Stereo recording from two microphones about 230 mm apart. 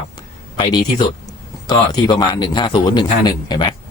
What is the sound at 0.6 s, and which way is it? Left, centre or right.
Speech, centre.